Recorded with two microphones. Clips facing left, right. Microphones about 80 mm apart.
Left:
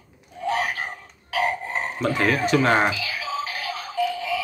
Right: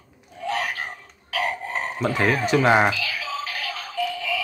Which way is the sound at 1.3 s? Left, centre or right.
Centre.